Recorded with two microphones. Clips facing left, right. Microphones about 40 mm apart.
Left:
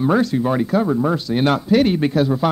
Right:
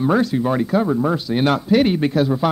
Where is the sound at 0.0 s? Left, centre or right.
Centre.